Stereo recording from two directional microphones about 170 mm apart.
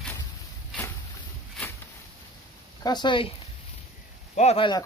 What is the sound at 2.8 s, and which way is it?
Speech, 25° left (ahead or behind).